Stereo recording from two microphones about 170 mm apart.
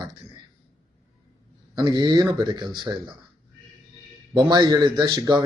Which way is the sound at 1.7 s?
25° right (ahead or behind).